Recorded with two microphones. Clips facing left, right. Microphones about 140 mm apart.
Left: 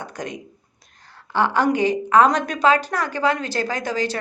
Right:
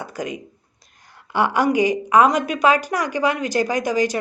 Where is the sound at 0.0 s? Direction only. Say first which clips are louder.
Right 3 dB; 10° right (ahead or behind).